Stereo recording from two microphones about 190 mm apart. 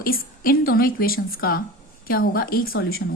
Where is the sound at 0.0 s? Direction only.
50° left (ahead or behind).